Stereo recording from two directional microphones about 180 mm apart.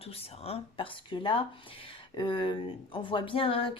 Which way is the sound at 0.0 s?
35° left (ahead or behind).